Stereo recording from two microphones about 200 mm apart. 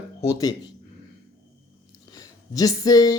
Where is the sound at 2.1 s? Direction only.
20° left (ahead or behind).